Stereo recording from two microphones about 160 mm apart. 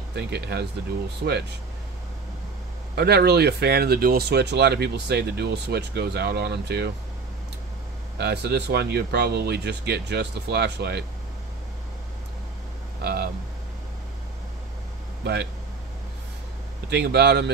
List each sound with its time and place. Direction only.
0.1 s speech: 90° right
3.0 s speech: 80° right
8.2 s speech: 90° right
13.0 s a sound: 80° right
16.9 s speech: 90° right